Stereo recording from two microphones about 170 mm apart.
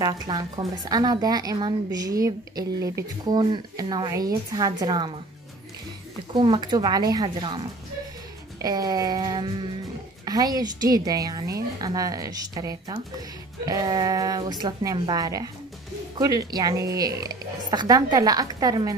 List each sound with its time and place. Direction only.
0.0 s a woman's voice: 25° right (ahead or behind)
6.3 s a woman's voice: 30° right (ahead or behind)